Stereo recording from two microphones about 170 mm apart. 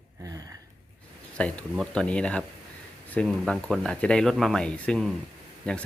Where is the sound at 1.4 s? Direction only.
5° left (ahead or behind).